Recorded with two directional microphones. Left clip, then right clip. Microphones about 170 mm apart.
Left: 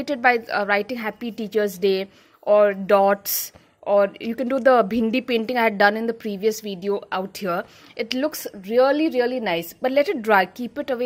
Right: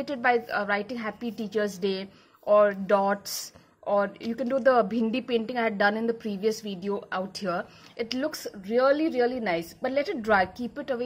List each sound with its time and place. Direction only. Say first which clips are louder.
0.0 s a woman's voice: left 5 dB; 40° left (ahead or behind)